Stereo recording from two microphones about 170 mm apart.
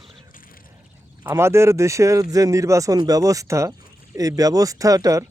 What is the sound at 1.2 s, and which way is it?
Speech, 15° right (ahead or behind).